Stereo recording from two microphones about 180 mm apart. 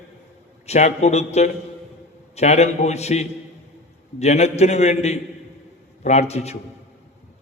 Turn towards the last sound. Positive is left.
turn(degrees=35)  # may be behind; listen again after turning